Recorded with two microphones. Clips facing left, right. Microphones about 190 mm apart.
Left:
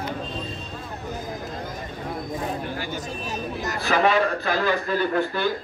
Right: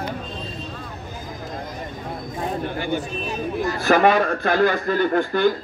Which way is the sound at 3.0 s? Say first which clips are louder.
Right 3 dB; 40° left (ahead or behind).